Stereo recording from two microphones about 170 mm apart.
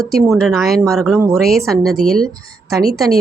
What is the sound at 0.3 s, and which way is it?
A woman's voice, centre (ahead or behind).